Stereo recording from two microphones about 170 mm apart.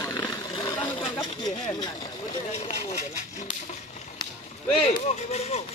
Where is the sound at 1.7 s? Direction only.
25° left (ahead or behind).